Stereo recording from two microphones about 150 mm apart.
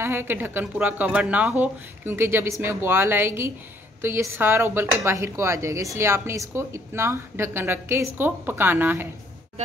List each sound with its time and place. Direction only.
0.0 s speech: 15° right (ahead or behind)